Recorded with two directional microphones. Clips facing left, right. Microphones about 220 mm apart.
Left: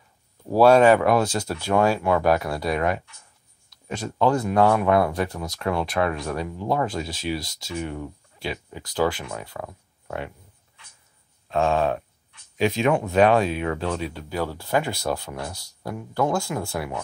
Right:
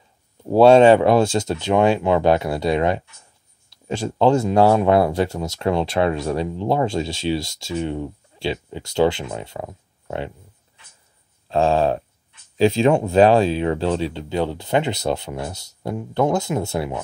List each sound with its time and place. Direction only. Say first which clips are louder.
0.5 s speech: right 4 dB; 25° right (ahead or behind)
11.4 s a sound: right 4 dB; 30° right (ahead or behind)
12.5 s speech: right 5 dB; 30° right (ahead or behind)